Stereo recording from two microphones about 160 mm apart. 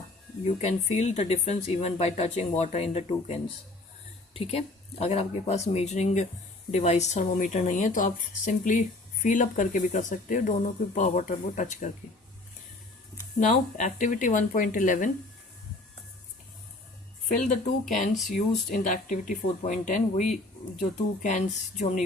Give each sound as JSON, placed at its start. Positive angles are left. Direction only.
{"t": 0.4, "sound": "speech", "side_deg": 45}
{"t": 4.4, "sound": "speech", "side_deg": 40}
{"t": 13.4, "sound": "speech", "side_deg": 50}
{"t": 17.2, "sound": "speech", "side_deg": 55}